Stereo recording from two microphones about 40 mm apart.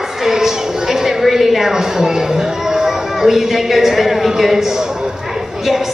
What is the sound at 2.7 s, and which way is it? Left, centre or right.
A woman's voice, centre.